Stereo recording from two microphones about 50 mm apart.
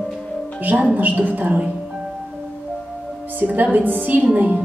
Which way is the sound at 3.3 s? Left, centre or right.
Right.